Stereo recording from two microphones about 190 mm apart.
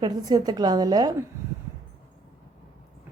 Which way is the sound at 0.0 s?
20° right (ahead or behind).